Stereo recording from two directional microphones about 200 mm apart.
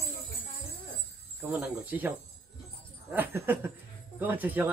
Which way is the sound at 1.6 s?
10° right (ahead or behind).